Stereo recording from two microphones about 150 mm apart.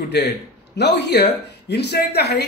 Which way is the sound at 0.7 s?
90° left.